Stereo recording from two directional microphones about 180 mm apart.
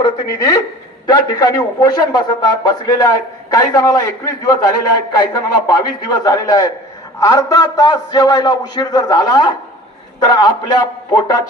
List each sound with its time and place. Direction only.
0.0 s a man's voice: 20° left (ahead or behind)